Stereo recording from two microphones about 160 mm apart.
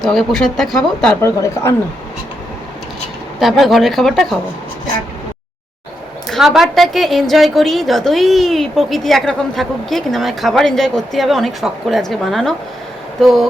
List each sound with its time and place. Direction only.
0.0 s a woman's voice: centre (ahead or behind)
1.2 s speech: 15° left (ahead or behind)
3.4 s a woman's voice: centre (ahead or behind)
6.2 s a woman's voice: centre (ahead or behind)